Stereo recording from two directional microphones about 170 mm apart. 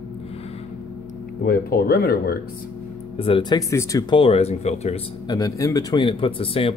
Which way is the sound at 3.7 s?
15° left (ahead or behind).